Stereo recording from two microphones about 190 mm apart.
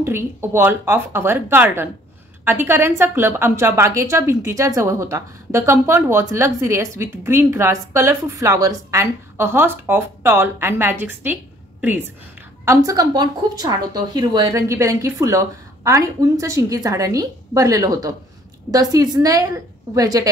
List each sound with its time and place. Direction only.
0.0 s a woman's voice: 10° right (ahead or behind)
12.6 s a woman's voice: 20° right (ahead or behind)